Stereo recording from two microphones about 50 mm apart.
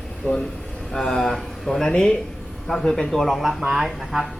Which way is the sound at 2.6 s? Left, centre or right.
Centre.